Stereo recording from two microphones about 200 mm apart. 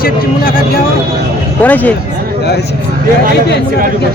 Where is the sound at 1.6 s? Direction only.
10° left (ahead or behind).